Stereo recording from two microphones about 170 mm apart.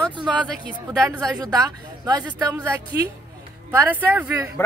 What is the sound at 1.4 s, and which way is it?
Speech, 20° right (ahead or behind).